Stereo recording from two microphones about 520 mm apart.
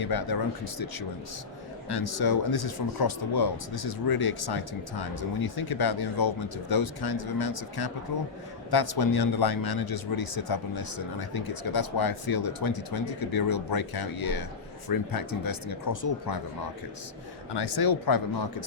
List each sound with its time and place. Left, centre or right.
0.0 s speech: left
17.5 s speech: left